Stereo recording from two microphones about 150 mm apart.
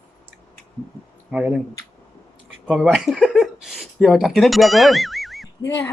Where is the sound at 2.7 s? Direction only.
Centre (ahead or behind).